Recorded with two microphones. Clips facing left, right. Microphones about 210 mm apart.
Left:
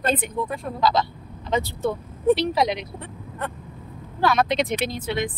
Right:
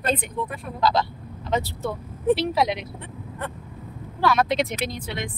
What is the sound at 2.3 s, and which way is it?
Speech, 5° right (ahead or behind).